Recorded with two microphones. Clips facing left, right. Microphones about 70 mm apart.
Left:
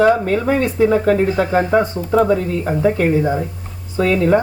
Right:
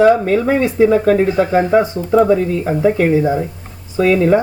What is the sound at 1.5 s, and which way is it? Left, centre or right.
Speech, centre.